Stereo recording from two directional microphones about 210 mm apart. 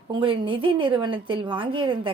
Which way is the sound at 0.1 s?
25° right (ahead or behind).